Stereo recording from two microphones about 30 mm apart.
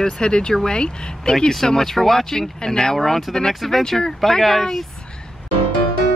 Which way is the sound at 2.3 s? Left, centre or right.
Centre.